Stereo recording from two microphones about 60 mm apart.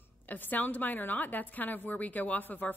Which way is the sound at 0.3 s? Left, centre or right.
Left.